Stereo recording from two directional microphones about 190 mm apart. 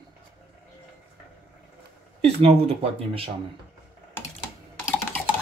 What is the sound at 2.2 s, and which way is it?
Speech, 30° right (ahead or behind).